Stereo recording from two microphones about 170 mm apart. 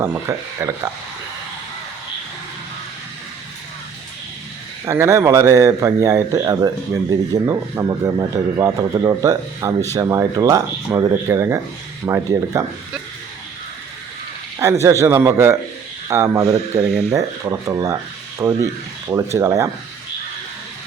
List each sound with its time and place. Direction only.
0.0 s speech: 15° right (ahead or behind)
4.9 s speech: 15° right (ahead or behind)
14.6 s speech: 15° right (ahead or behind)
16.4 s speech: 35° right (ahead or behind)
17.1 s speech: 15° right (ahead or behind)